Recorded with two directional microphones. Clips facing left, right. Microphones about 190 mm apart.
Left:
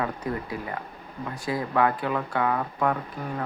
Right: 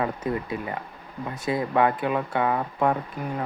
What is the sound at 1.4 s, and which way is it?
Speech, 20° right (ahead or behind).